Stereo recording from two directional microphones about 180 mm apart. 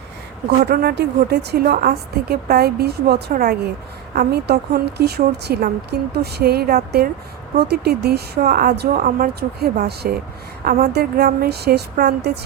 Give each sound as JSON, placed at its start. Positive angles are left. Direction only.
{"t": 0.4, "sound": "a woman's voice", "side_deg": -60}